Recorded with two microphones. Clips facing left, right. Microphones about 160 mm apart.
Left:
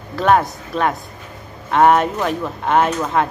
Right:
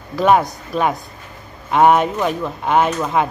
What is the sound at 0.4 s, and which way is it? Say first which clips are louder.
Speech: right 1 dB; 15° right (ahead or behind).